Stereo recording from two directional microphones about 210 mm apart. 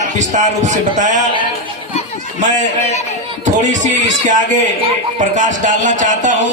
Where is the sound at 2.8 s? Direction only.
30° left (ahead or behind).